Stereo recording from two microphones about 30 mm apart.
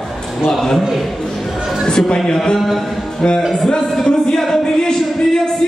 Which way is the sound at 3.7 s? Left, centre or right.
Centre.